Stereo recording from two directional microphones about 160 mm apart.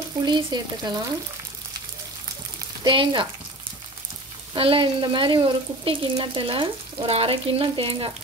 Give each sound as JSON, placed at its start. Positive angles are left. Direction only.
{"t": 0.2, "sound": "speech", "side_deg": -25}
{"t": 2.8, "sound": "speech", "side_deg": -30}
{"t": 4.6, "sound": "speech", "side_deg": -35}